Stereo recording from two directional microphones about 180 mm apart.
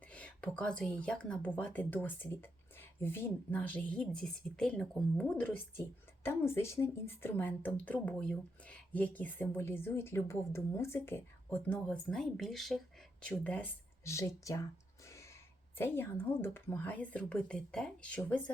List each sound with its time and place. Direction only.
0.1 s speech: 5° left (ahead or behind)
15.0 s gasp: 15° left (ahead or behind)
15.8 s speech: 15° left (ahead or behind)